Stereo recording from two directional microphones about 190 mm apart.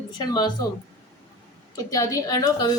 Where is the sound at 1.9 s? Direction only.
20° left (ahead or behind).